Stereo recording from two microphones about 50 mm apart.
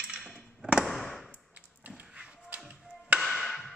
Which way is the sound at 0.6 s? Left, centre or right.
Centre.